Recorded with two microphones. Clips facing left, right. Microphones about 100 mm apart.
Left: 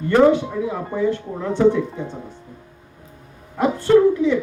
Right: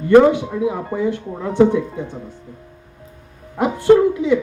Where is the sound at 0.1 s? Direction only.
15° right (ahead or behind).